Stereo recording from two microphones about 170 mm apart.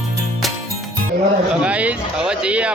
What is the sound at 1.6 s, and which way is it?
Speech, 5° right (ahead or behind).